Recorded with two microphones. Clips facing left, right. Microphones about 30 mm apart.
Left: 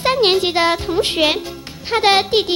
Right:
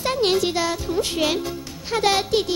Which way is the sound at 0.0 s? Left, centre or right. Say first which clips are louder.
Left 5 dB; left.